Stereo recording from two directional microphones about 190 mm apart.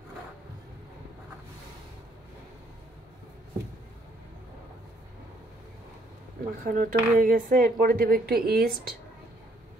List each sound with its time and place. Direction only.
6.6 s speech: 45° right (ahead or behind)